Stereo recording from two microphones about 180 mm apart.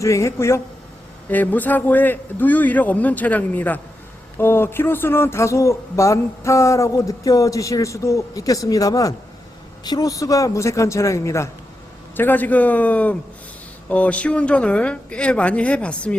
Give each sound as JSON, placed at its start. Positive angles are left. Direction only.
{"t": 0.0, "sound": "speech", "side_deg": 15}